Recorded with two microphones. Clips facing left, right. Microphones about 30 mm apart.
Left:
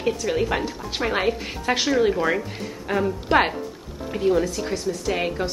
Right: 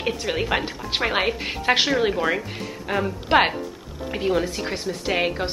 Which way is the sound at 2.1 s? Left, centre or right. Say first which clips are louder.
Even; centre.